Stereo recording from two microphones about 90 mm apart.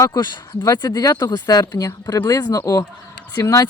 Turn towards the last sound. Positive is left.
turn(degrees=35)  # may be behind; listen again after turning